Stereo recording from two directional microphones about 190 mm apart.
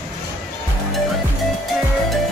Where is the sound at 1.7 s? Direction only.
Centre (ahead or behind).